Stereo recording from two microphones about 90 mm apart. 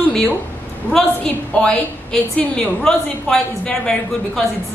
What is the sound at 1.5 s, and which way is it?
A man's voice, 10° left (ahead or behind).